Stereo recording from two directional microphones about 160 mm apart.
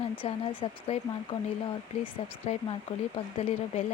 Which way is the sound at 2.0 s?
35° left (ahead or behind).